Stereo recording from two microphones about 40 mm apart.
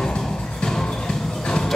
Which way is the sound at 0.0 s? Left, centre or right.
Centre.